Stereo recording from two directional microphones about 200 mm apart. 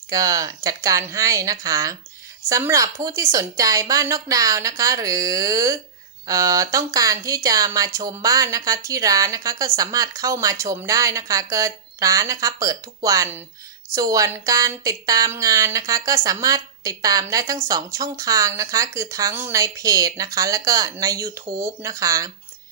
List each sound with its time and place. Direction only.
0.1 s a woman's voice: 15° right (ahead or behind)